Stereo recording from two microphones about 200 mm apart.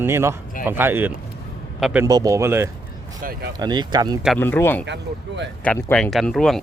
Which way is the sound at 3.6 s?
20° right (ahead or behind).